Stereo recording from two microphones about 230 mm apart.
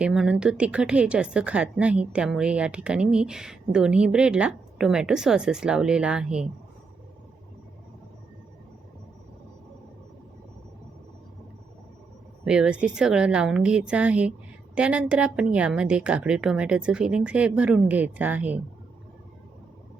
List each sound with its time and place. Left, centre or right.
0.0 s a woman's voice: centre
12.5 s a woman's voice: centre